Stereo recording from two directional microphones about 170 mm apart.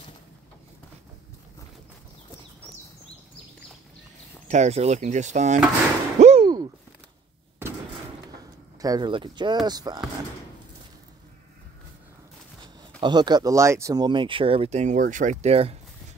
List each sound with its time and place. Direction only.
4.5 s speech: 40° right (ahead or behind)
6.1 s a sound: 40° right (ahead or behind)
8.8 s speech: 25° right (ahead or behind)
13.0 s speech: 25° right (ahead or behind)